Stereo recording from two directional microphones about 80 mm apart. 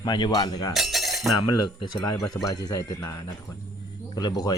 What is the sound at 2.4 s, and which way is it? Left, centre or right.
A man's voice, left.